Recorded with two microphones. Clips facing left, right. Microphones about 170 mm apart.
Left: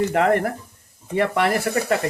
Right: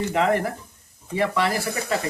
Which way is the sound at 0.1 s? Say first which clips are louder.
Left 3 dB; 55° left (ahead or behind).